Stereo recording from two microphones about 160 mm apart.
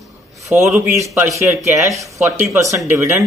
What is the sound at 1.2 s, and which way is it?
Speech, 20° right (ahead or behind).